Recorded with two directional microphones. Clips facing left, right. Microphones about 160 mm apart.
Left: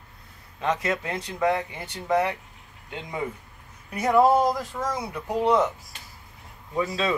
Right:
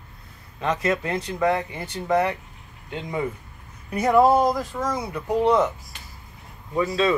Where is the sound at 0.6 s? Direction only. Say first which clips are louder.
Right 2 dB; 10° left (ahead or behind).